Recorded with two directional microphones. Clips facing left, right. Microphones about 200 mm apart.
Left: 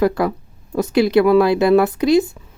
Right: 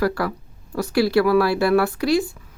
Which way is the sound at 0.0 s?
20° left (ahead or behind).